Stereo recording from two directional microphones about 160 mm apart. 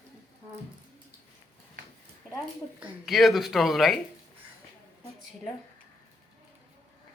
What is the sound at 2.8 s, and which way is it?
Speech, centre (ahead or behind).